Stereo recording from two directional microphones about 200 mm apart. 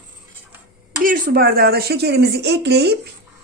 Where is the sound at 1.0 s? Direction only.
40° right (ahead or behind).